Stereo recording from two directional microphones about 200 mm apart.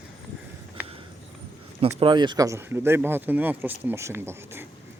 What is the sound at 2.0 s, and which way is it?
Speech, 25° right (ahead or behind).